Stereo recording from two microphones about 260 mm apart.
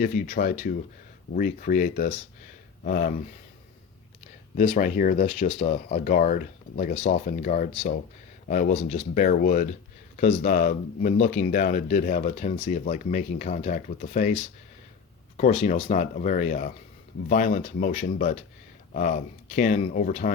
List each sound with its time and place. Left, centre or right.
0.0 s speech: left
4.5 s speech: left